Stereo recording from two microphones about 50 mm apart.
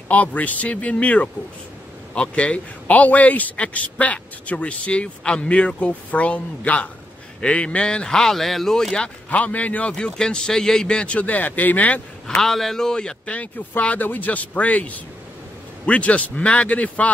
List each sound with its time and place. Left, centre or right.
0.1 s a man's voice: left; by 8.9 s centre
9.3 s a man's voice: left
9.9 s a man's voice: centre
11.1 s speech: left
12.4 s a man's voice: centre; by 17.1 s left